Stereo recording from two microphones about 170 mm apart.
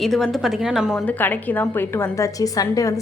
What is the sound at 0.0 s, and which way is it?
Speech, centre (ahead or behind).